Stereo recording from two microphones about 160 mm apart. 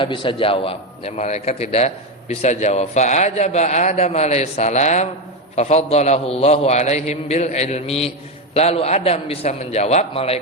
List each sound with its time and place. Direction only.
0.0 s a man's voice: 30° left (ahead or behind)